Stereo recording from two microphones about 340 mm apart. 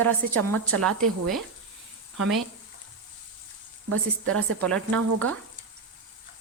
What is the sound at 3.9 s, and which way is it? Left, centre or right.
Speech, right.